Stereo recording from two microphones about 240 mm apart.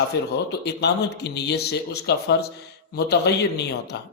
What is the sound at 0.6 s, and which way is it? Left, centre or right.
Speech, left.